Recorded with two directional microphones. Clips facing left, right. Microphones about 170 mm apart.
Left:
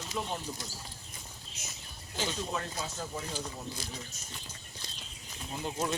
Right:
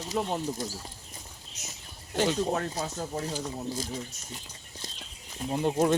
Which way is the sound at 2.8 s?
45° right (ahead or behind).